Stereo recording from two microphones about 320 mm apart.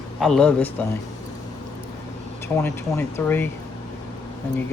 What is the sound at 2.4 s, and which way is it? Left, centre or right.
Speech, centre.